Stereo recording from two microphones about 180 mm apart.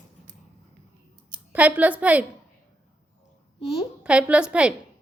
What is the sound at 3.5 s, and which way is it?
Speech, 30° left (ahead or behind).